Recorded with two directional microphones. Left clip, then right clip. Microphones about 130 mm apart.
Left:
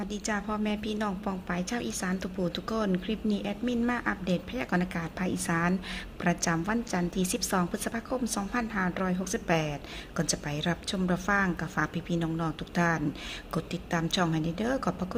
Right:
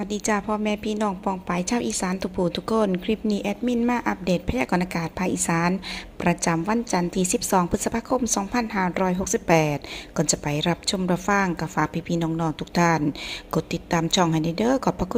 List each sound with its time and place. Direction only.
0.0 s a woman's voice: 40° right (ahead or behind)